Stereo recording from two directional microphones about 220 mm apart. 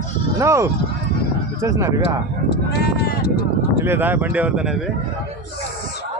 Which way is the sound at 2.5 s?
45° left (ahead or behind).